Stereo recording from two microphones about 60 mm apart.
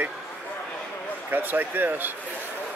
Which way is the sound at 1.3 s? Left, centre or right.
Right.